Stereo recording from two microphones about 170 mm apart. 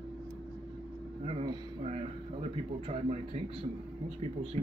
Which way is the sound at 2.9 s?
40° right (ahead or behind).